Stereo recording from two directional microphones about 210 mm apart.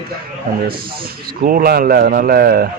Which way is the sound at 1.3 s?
45° right (ahead or behind).